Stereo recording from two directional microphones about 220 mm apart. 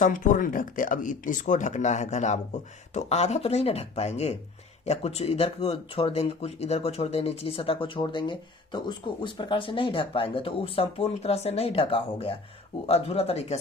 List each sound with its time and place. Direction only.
0.0 s speech: 35° left (ahead or behind)